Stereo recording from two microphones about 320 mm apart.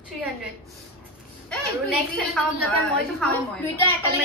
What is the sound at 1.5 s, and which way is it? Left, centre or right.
A woman's voice, centre.